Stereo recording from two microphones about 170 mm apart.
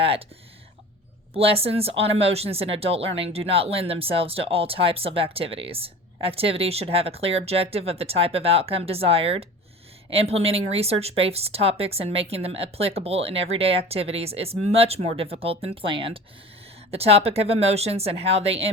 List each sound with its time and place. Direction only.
0.0 s speech: 35° right (ahead or behind)
1.3 s speech: 35° right (ahead or behind)